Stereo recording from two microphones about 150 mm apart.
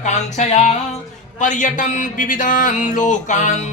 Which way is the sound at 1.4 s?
55° left (ahead or behind).